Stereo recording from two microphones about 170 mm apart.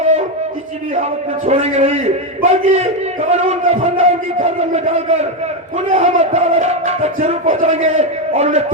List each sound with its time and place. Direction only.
1.5 s speech: 40° right (ahead or behind)